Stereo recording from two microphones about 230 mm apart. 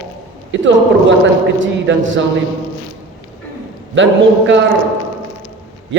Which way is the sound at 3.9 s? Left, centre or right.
Right.